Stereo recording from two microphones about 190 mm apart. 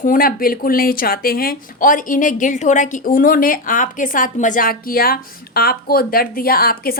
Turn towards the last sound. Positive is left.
turn(degrees=50)  # may be behind; listen again after turning